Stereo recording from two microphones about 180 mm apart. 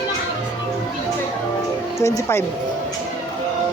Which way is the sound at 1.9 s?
15° left (ahead or behind).